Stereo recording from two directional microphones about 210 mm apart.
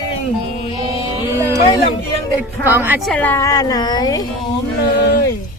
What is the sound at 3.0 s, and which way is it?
A woman's voice, 5° left (ahead or behind).